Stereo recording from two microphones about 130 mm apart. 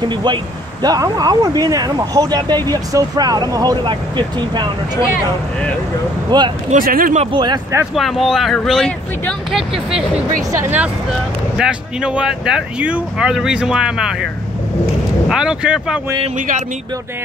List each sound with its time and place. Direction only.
0.1 s speech: 35° right (ahead or behind)
6.3 s speech: 35° right (ahead or behind)
6.7 s speech: 90° right
7.3 s speech: 35° right (ahead or behind)
7.9 s speech: centre (ahead or behind)
10.5 s speech: 20° right (ahead or behind)
11.5 s speech: 5° right (ahead or behind)
15.2 s speech: 5° right (ahead or behind)
16.3 s speech: 80° right